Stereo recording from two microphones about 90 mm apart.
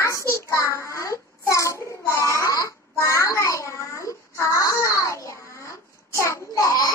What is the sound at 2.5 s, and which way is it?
Babbling, 35° left (ahead or behind).